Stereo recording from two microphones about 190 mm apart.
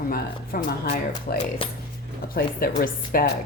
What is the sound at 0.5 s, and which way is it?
Speech, 50° left (ahead or behind).